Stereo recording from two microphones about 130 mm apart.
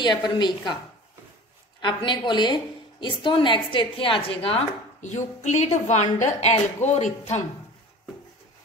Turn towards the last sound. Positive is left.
turn(degrees=60)  # may be behind; listen again after turning